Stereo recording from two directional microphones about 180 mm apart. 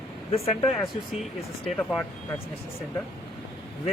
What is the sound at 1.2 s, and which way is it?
Speech, 5° left (ahead or behind).